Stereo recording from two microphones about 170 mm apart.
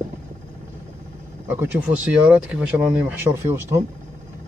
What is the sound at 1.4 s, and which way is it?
Speech, 10° right (ahead or behind).